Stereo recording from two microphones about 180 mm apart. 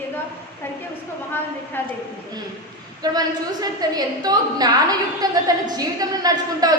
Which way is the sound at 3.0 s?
20° right (ahead or behind).